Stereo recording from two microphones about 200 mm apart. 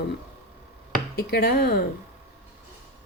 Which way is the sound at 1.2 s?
55° left (ahead or behind).